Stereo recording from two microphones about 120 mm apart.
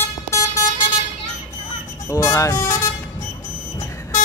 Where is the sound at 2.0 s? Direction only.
25° left (ahead or behind).